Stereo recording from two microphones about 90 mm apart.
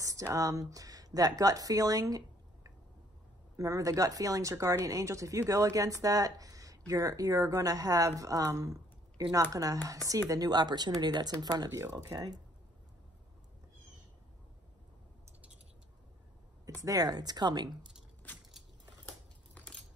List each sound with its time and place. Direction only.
0.0 s speech: 35° right (ahead or behind)
11.7 s speech: 35° right (ahead or behind)
16.8 s speech: 45° right (ahead or behind)
19.0 s a sound: 15° left (ahead or behind)